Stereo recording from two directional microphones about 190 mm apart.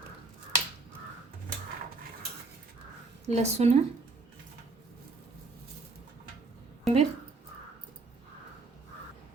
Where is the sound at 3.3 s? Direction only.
35° right (ahead or behind).